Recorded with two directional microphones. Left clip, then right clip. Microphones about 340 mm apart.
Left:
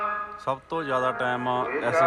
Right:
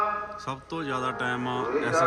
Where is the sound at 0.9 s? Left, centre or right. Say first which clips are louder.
Left 4 dB; centre.